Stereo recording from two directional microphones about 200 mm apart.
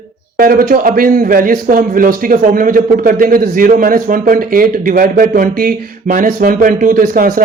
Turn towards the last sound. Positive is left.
turn(degrees=-45)  # may be behind; listen again after turning